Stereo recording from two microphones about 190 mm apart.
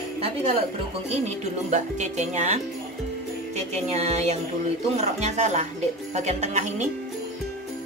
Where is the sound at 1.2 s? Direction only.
40° right (ahead or behind).